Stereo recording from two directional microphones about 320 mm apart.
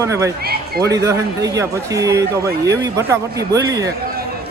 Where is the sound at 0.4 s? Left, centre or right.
Right.